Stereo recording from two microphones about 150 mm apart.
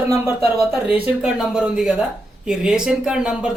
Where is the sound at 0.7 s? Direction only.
10° right (ahead or behind).